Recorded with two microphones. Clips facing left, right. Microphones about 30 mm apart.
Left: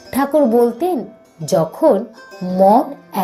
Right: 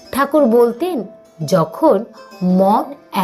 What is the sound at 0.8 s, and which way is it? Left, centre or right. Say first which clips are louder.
Speech: left 2 dB; right.